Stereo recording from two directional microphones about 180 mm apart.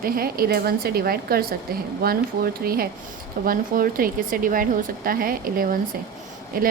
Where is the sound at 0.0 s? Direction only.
55° right (ahead or behind).